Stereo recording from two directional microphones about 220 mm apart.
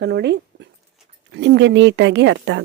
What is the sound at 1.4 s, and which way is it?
Speech, 55° right (ahead or behind).